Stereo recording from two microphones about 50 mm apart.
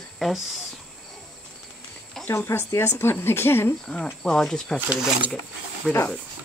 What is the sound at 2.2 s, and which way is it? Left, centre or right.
Speech, left.